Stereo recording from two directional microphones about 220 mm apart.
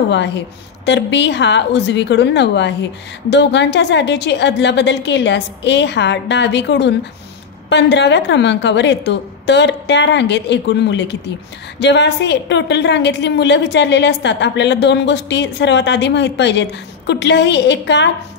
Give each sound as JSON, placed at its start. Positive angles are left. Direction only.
{"t": 0.1, "sound": "a woman's voice", "side_deg": 50}